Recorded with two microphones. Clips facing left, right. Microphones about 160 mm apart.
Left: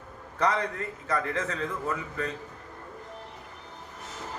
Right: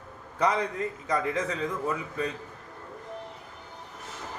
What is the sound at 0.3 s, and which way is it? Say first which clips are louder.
A man's voice: right 1 dB; 10° right (ahead or behind).